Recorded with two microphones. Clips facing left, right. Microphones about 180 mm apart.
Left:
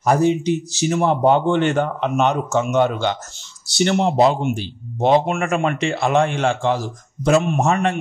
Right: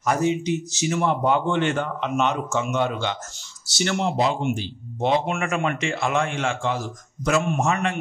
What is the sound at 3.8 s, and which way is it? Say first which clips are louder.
Speech: left 6 dB; 25° left (ahead or behind).